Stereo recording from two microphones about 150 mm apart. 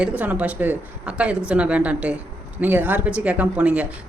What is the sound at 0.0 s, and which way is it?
A woman's voice, 10° right (ahead or behind).